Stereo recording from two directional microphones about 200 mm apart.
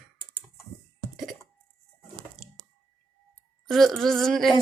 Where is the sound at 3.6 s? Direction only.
Centre (ahead or behind).